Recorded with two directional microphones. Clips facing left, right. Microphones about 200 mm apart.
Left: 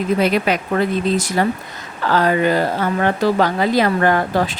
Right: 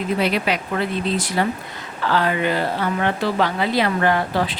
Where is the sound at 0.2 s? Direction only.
45° left (ahead or behind).